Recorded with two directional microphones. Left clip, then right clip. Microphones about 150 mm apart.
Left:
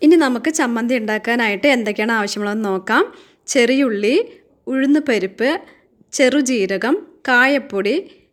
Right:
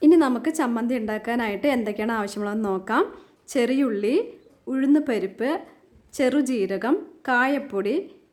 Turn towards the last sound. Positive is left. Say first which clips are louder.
# left 7 dB
turn(degrees=10)  # may be behind; listen again after turning